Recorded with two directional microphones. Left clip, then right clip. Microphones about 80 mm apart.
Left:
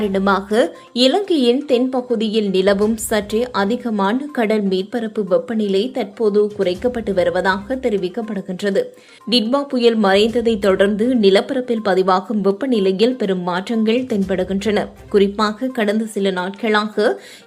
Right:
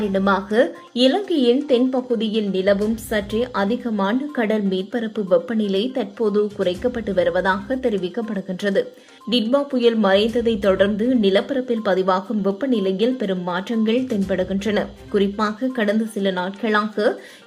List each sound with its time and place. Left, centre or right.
0.0 s a woman's voice: left
3.3 s speech: left; by 6.0 s centre
6.0 s speech: centre
9.3 s a woman's voice: left